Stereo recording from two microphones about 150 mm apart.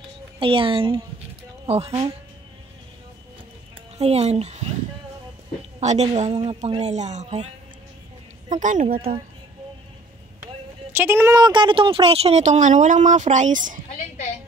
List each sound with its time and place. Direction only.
0.4 s a woman's voice: 35° right (ahead or behind)
4.0 s speech: 45° right (ahead or behind)
5.8 s a woman's voice: 50° right (ahead or behind)
8.5 s a woman's voice: 60° right (ahead or behind)
10.9 s speech: 15° right (ahead or behind); by 13.8 s 60° right (ahead or behind)